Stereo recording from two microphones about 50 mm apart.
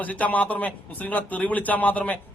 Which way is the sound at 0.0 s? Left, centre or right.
Left.